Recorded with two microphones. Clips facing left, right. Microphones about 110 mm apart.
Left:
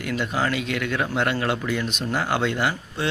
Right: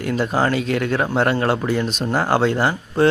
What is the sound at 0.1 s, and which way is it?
Speech, 35° right (ahead or behind).